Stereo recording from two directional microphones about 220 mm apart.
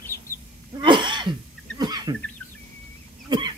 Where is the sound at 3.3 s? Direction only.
20° right (ahead or behind).